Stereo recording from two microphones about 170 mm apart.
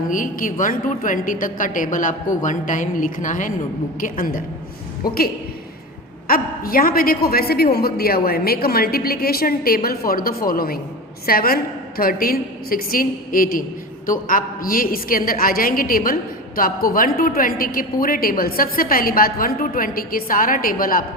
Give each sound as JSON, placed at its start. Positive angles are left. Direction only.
{"t": 0.1, "sound": "a woman's voice", "side_deg": 50}
{"t": 6.2, "sound": "a woman's voice", "side_deg": 60}